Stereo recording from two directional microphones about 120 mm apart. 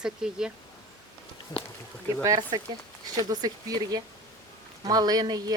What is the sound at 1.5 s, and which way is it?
Speech, 35° left (ahead or behind).